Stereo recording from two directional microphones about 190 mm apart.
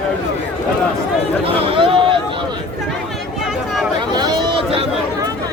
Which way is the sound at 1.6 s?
30° right (ahead or behind).